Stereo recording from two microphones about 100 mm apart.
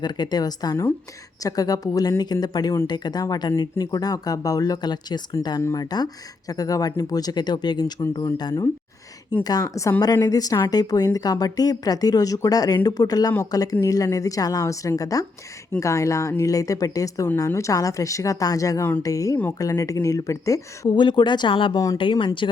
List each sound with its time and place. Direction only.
0.0 s a woman's voice: 45° left (ahead or behind)
20.9 s speech: 50° left (ahead or behind)